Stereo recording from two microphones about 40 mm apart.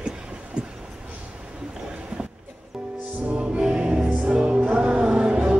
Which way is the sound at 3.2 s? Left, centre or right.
Right.